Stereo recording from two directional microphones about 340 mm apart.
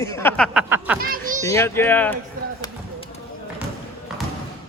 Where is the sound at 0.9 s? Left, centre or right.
Right.